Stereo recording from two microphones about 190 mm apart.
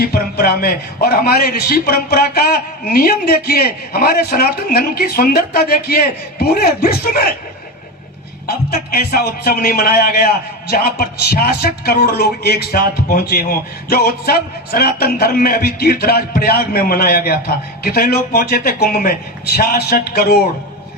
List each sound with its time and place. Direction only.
0.0 s a man's voice: 50° left (ahead or behind)
8.4 s a man's voice: 55° left (ahead or behind)